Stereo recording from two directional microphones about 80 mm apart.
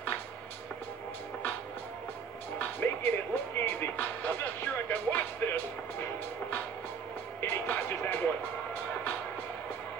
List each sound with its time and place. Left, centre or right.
2.6 s music: left
7.3 s music: left